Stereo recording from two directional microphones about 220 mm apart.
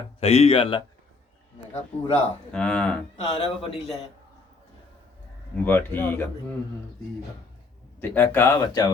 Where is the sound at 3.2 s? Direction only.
25° left (ahead or behind).